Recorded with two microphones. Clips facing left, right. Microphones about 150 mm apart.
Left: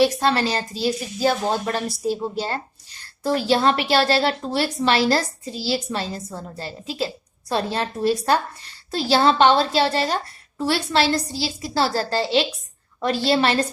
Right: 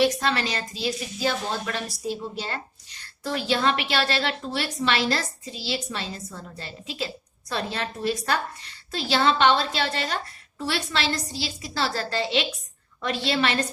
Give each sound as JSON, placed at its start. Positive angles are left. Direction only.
{"t": 0.0, "sound": "a woman's voice", "side_deg": 35}